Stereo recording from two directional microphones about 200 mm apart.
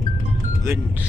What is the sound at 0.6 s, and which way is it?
Speech, 15° right (ahead or behind).